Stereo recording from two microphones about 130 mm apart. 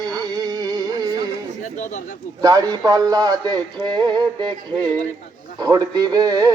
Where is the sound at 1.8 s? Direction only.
70° left (ahead or behind).